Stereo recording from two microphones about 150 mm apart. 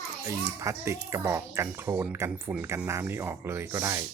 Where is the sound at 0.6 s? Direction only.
15° right (ahead or behind).